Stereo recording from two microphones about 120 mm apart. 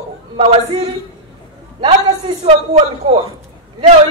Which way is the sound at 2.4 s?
65° right (ahead or behind).